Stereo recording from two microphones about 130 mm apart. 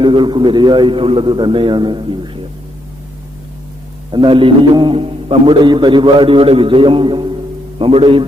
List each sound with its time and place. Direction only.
0.0 s a man's voice: 40° right (ahead or behind)
4.1 s a man's voice: 40° right (ahead or behind)